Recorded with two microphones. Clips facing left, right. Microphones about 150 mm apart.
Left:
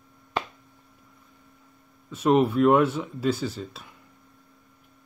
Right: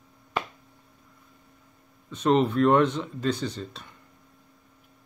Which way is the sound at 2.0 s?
10° left (ahead or behind).